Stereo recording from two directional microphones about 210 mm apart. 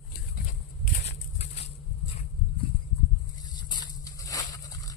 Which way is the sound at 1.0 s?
30° left (ahead or behind).